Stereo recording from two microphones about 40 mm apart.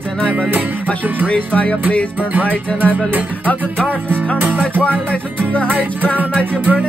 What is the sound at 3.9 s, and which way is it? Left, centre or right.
Music, right.